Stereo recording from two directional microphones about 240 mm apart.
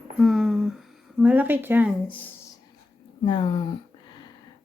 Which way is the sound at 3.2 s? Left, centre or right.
Centre.